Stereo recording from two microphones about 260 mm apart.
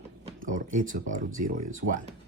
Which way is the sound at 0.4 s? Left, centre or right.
Right.